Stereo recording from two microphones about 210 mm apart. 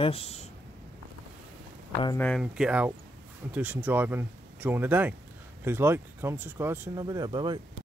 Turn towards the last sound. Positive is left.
turn(degrees=-20)  # may be behind; listen again after turning